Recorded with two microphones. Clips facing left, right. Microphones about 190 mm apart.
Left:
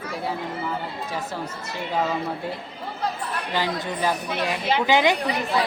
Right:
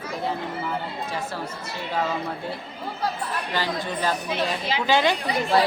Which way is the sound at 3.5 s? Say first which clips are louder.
Left 2 dB; 15° left (ahead or behind).